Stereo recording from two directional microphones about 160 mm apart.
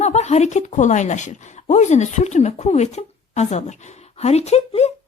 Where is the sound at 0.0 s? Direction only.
45° left (ahead or behind).